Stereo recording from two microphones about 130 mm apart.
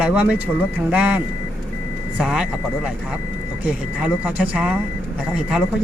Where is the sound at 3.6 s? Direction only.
10° right (ahead or behind).